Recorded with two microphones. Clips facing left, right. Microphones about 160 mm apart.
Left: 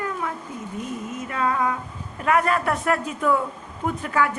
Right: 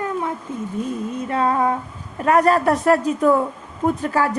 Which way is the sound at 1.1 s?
30° right (ahead or behind).